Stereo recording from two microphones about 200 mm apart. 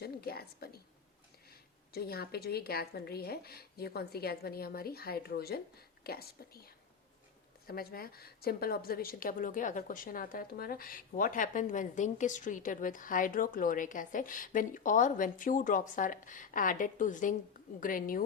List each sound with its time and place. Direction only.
0.0 s a woman's voice: 50° left (ahead or behind)
1.9 s a woman's voice: 50° left (ahead or behind)
7.7 s a woman's voice: 50° left (ahead or behind)